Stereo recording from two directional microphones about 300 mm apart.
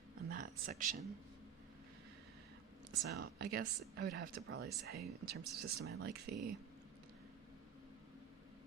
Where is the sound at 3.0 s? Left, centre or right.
Right.